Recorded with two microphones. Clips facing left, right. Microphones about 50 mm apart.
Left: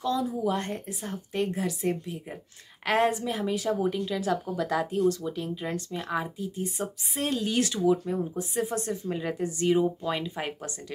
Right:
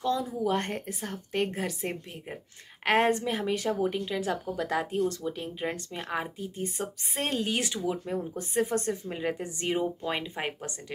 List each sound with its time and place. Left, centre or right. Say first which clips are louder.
0.0 s a woman's voice: left 1 dB; right
4.0 s speech: left 2 dB; right
8.0 s a woman's voice: left 3 dB; right
9.1 s speech: left 2 dB; right